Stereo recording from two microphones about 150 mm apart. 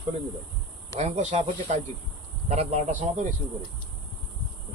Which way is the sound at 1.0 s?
45° right (ahead or behind).